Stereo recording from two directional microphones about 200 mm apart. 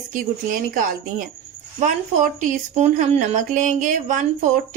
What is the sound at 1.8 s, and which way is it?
Speech, 40° right (ahead or behind).